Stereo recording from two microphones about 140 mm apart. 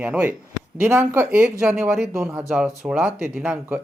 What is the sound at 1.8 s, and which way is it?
A man's voice, 5° right (ahead or behind).